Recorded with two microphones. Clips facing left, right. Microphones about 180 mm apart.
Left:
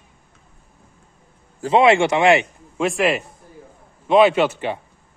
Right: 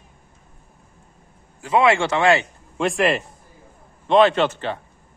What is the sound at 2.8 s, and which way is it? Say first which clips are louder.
A man's voice: left 1 dB; centre (ahead or behind).